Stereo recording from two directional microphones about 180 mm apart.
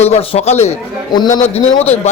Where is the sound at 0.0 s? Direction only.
35° left (ahead or behind).